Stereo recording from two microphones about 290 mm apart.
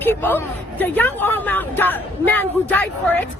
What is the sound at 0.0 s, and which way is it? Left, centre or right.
Speech, centre.